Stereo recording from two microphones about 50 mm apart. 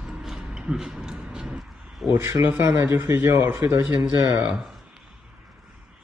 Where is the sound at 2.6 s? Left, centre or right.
Right.